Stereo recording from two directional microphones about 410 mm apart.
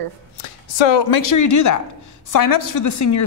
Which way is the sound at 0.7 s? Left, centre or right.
Left.